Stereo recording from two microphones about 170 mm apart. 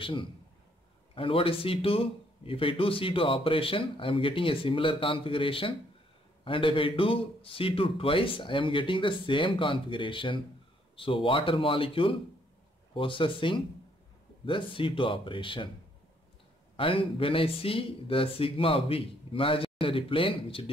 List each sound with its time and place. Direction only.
0.0 s a man's voice: 30° left (ahead or behind)
16.7 s a man's voice: 30° left (ahead or behind)